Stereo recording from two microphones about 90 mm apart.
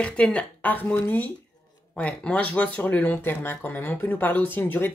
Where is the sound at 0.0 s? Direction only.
10° left (ahead or behind).